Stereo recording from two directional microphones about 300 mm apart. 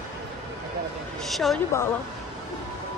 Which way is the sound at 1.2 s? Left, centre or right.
Centre.